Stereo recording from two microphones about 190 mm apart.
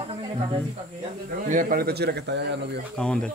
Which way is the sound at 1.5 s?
45° right (ahead or behind).